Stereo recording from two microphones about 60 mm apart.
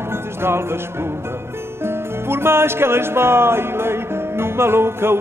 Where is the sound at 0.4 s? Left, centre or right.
Right.